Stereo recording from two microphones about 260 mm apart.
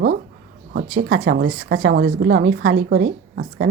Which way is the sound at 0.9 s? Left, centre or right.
Right.